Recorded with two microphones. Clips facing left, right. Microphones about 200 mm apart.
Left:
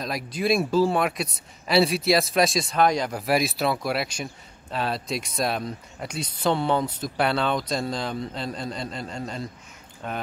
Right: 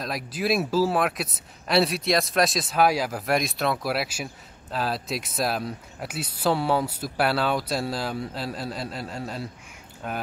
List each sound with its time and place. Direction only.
0.0 s speech: centre (ahead or behind)